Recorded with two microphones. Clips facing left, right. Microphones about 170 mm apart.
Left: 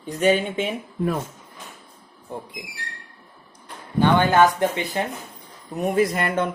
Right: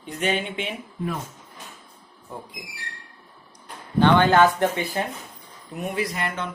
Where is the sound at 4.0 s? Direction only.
15° left (ahead or behind).